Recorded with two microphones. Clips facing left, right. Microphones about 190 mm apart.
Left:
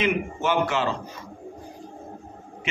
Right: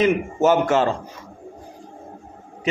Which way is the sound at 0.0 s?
40° right (ahead or behind).